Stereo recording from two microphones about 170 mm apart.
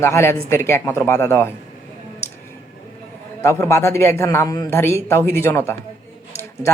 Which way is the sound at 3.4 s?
15° left (ahead or behind).